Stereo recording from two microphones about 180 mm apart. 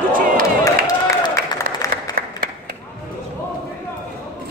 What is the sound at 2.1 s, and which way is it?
Applause, 55° right (ahead or behind).